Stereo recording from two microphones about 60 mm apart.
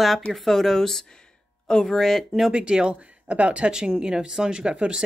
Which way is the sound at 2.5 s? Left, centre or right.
Centre.